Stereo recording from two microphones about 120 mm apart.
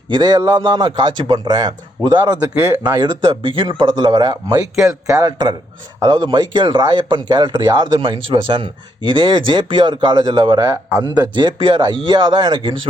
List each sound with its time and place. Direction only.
0.1 s speech: 35° right (ahead or behind)
2.6 s speech: 20° right (ahead or behind)
3.0 s speech: 45° right (ahead or behind)